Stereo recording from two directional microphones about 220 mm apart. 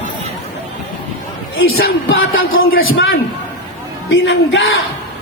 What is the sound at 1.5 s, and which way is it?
A man's voice, 55° left (ahead or behind).